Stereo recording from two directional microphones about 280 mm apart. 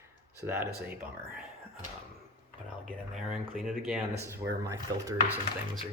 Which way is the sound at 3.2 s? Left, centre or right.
Centre.